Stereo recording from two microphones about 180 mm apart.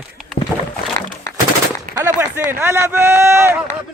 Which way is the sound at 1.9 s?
15° right (ahead or behind).